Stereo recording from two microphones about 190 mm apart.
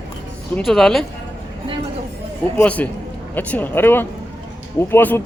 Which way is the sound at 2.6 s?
10° left (ahead or behind).